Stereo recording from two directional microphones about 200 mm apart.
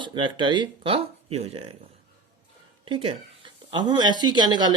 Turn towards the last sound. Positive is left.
turn(degrees=-20)  # may be behind; listen again after turning